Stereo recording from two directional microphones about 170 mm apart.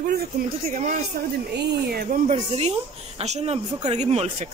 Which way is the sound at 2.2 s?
40° right (ahead or behind).